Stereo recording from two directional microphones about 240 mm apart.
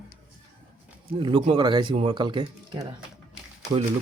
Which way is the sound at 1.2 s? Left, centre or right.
Right.